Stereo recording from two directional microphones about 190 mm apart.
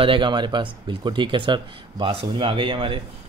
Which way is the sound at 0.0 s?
25° right (ahead or behind).